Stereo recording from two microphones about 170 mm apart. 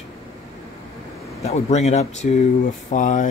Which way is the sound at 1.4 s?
40° left (ahead or behind).